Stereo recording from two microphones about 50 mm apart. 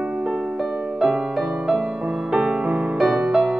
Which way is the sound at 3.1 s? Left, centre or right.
Centre.